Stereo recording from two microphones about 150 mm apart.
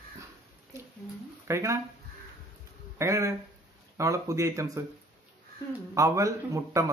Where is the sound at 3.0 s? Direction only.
20° right (ahead or behind).